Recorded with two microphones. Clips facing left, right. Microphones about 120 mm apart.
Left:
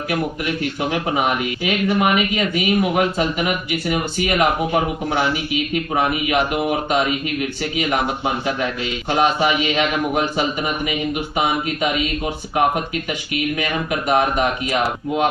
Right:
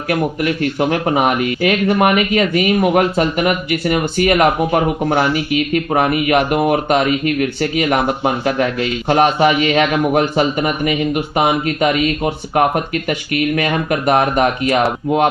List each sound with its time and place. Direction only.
0.3 s speech: 50° right (ahead or behind)